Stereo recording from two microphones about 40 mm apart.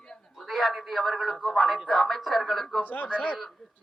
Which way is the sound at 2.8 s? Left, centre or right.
Left.